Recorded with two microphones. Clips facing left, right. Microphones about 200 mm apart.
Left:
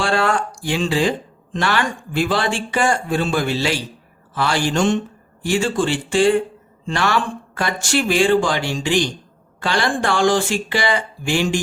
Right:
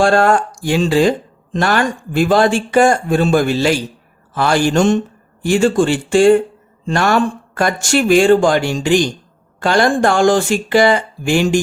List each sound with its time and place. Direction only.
0.0 s speech: 45° right (ahead or behind)